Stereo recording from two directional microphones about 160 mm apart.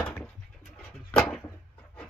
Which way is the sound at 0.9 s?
5° left (ahead or behind).